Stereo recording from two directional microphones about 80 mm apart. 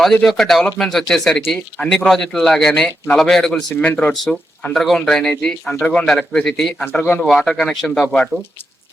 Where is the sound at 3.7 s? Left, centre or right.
Centre.